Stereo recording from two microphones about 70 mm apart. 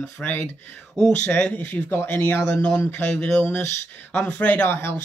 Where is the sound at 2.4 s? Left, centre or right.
Centre.